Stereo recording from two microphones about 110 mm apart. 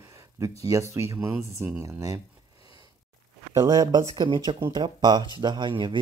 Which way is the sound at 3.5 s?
35° right (ahead or behind).